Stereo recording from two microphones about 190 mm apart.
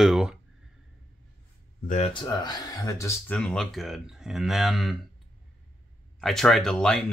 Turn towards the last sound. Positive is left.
turn(degrees=5)  # may be behind; listen again after turning